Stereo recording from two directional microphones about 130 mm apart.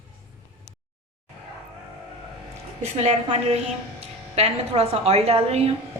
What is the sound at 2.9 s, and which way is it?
A woman's voice, 55° right (ahead or behind).